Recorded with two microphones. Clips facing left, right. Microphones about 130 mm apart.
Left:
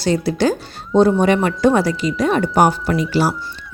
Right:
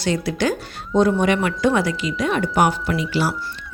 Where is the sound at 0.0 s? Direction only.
35° left (ahead or behind).